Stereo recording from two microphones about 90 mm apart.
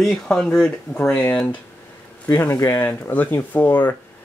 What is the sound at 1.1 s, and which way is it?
Speech, 20° left (ahead or behind).